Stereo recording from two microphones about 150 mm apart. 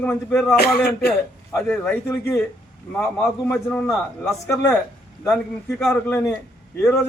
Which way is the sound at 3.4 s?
15° left (ahead or behind).